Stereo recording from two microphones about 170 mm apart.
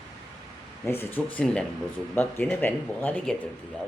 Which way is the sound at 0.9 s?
15° left (ahead or behind).